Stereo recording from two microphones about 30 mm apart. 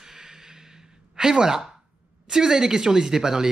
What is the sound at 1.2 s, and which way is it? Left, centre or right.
Speech, right.